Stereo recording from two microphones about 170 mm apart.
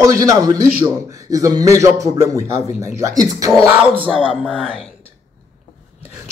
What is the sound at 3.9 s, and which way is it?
Music, 10° left (ahead or behind).